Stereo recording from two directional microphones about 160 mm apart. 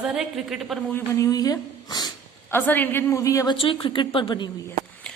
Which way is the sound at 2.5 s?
10° left (ahead or behind).